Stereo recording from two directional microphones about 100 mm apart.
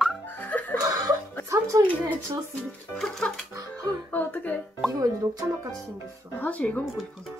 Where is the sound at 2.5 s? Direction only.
5° left (ahead or behind).